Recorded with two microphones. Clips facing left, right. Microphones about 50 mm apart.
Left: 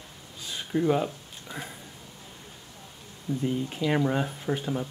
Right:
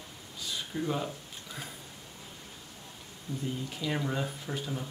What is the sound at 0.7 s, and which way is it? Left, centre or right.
Speech, left.